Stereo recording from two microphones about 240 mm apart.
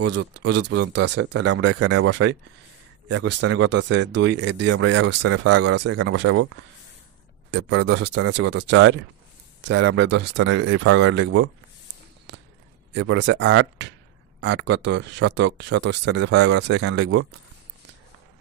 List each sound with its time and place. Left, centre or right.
0.0 s speech: right
12.3 s a sound: right
12.9 s speech: right